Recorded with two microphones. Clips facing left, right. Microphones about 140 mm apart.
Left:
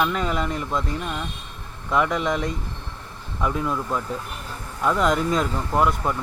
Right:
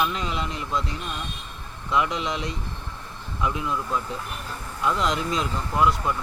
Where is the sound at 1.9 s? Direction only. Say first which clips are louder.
Left 3 dB; 50° left (ahead or behind).